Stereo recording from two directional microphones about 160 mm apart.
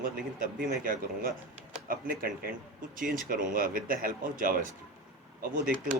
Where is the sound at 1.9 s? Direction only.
60° right (ahead or behind).